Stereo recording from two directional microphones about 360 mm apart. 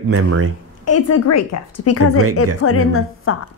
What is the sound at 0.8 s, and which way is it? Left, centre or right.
A woman's voice, left.